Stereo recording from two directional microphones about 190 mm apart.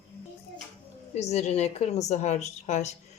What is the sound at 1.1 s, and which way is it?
A woman's voice, 35° left (ahead or behind).